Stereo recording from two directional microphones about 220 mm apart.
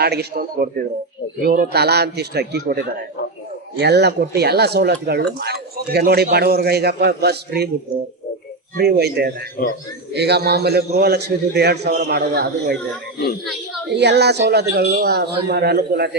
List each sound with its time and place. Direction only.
0.0 s speech: 45° right (ahead or behind)
3.8 s speech: 50° right (ahead or behind)
8.8 s speech: 50° right (ahead or behind)
13.9 s speech: 50° right (ahead or behind)